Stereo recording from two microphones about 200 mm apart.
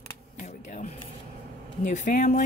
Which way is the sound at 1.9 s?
40° left (ahead or behind).